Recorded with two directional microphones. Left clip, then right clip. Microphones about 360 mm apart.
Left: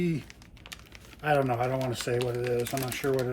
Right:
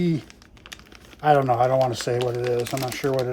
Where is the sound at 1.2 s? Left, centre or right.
Centre.